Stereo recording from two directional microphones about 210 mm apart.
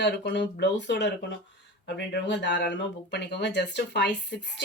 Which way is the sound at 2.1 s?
55° left (ahead or behind).